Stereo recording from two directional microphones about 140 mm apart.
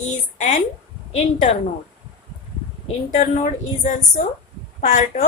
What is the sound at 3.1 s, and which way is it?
A woman's voice, 55° left (ahead or behind).